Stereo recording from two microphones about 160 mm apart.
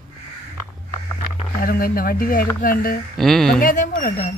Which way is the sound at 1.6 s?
65° left (ahead or behind).